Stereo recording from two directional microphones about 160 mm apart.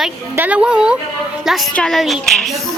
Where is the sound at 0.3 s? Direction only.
10° right (ahead or behind).